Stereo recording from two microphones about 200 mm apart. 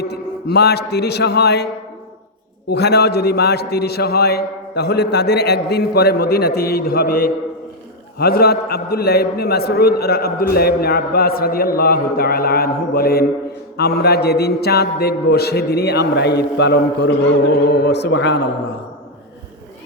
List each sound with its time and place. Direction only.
0.0 s a man's voice: 55° left (ahead or behind)